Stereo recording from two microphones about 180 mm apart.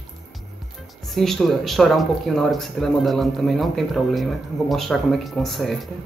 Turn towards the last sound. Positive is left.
turn(degrees=0)  # may be behind; listen again after turning